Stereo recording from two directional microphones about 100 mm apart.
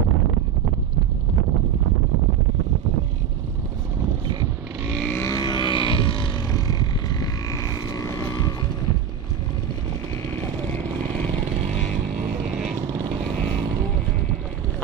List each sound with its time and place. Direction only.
5.0 s vehicle: 20° left (ahead or behind)
5.3 s a sound: 45° left (ahead or behind); by 6.3 s 60° left (ahead or behind)
6.5 s vehicle: 40° left (ahead or behind)